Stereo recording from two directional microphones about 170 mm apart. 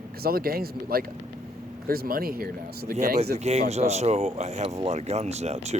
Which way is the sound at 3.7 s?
40° right (ahead or behind).